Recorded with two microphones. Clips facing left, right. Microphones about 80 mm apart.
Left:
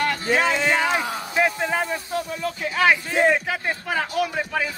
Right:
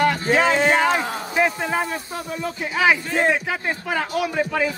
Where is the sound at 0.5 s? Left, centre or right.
Right.